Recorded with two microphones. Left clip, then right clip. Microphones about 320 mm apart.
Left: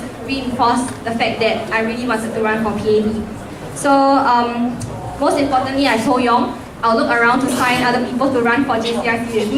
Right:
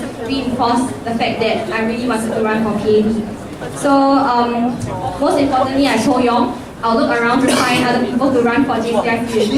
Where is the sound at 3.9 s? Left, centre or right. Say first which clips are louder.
Even; centre.